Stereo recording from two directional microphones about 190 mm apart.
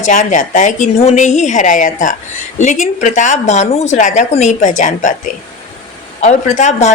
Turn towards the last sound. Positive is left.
turn(degrees=40)  # may be behind; listen again after turning